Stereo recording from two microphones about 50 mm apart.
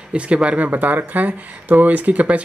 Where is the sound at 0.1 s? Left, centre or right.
Right.